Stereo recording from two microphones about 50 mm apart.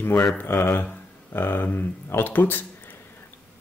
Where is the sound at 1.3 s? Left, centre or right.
Left.